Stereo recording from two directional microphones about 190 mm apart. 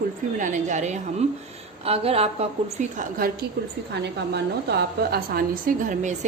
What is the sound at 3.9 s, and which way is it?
A woman's voice, 60° right (ahead or behind).